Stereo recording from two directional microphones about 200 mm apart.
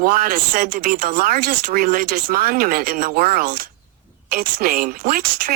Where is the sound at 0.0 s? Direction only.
45° right (ahead or behind).